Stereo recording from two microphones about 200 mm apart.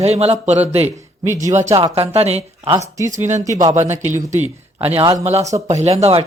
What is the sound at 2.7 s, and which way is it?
Speech, 15° right (ahead or behind).